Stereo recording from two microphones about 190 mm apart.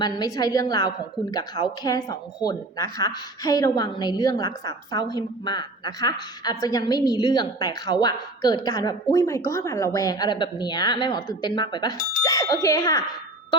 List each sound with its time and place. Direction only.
0.0 s a woman's voice: 20° left (ahead or behind)